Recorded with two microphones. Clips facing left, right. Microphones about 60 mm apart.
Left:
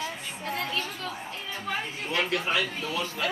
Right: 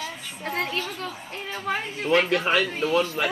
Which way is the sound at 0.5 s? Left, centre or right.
Right.